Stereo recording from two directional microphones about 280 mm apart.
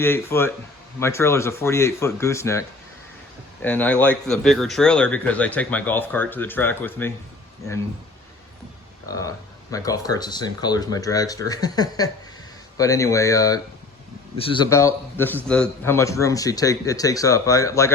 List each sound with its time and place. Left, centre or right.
0.0 s speech: centre
9.0 s speech: centre